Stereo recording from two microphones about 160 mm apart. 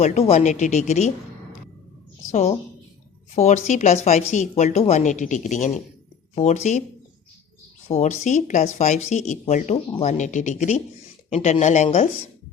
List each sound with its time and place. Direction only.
0.0 s a woman's voice: 40° left (ahead or behind)
2.2 s a woman's voice: 45° left (ahead or behind)
7.9 s a woman's voice: 45° left (ahead or behind)